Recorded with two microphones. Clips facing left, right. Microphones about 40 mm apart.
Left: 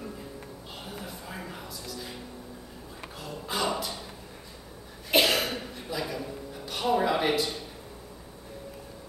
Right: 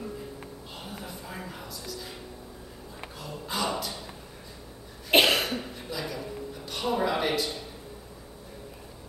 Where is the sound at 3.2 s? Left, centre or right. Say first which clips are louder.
Left 1 dB; centre.